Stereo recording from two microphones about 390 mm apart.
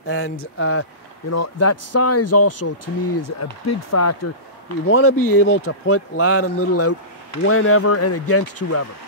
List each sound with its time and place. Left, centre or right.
0.0 s speech: left